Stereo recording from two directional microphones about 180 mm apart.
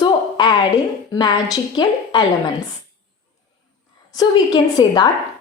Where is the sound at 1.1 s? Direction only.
25° left (ahead or behind).